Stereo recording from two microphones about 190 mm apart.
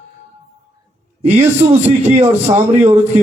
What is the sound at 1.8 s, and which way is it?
Speech, 35° right (ahead or behind).